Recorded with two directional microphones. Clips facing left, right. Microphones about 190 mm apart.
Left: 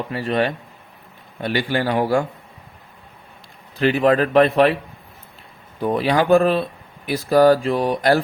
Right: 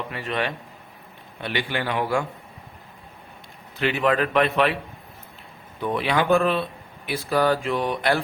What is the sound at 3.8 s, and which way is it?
Speech, 40° left (ahead or behind).